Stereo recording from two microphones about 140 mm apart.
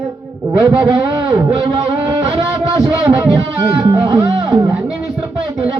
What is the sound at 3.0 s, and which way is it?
Speech, 30° right (ahead or behind).